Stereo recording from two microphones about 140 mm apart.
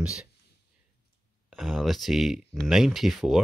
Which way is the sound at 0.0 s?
5° right (ahead or behind).